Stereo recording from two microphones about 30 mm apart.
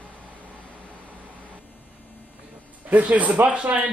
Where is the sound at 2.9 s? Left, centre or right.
Right.